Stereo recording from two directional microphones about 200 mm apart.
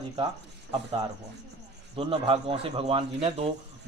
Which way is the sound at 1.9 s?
25° right (ahead or behind).